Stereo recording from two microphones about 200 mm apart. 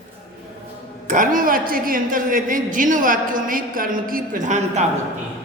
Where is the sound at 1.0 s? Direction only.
40° right (ahead or behind).